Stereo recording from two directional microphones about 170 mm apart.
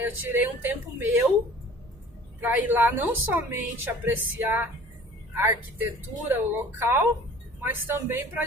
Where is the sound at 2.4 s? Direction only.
10° right (ahead or behind).